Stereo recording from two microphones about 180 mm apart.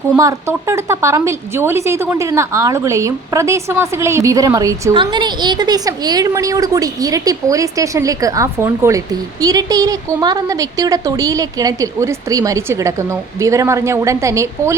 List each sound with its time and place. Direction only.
0.2 s a woman's voice: 15° right (ahead or behind)